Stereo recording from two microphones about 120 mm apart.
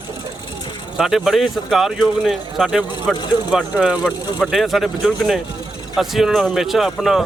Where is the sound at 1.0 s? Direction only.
Centre (ahead or behind).